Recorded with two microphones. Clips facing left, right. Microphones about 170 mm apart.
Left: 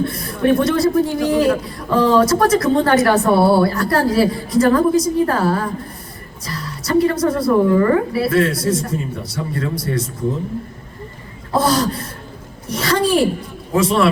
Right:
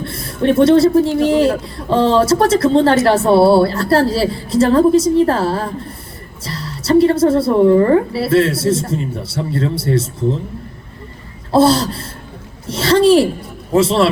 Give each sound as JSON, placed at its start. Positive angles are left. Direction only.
{"t": 0.1, "sound": "a man's voice", "side_deg": -30}
{"t": 11.5, "sound": "a man's voice", "side_deg": -30}